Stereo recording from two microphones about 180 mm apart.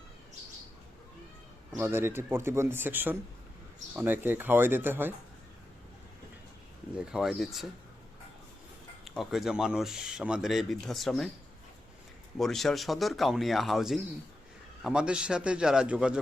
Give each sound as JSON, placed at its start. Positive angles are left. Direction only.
{"t": 1.7, "sound": "speech", "side_deg": -15}
{"t": 6.9, "sound": "speech", "side_deg": -5}
{"t": 9.0, "sound": "speech", "side_deg": 0}
{"t": 12.4, "sound": "speech", "side_deg": 0}